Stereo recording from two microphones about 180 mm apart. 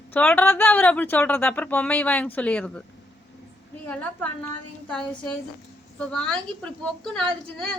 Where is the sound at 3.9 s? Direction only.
10° left (ahead or behind).